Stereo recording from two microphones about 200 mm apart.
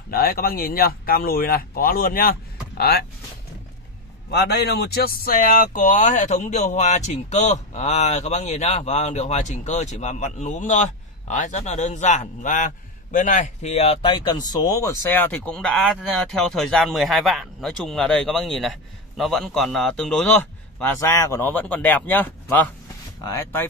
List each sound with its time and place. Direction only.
0.1 s speech: 50° left (ahead or behind)
4.3 s speech: 55° left (ahead or behind); by 20.3 s 5° left (ahead or behind)
20.8 s speech: 15° left (ahead or behind)